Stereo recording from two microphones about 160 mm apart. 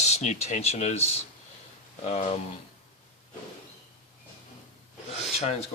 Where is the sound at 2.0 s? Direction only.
45° left (ahead or behind).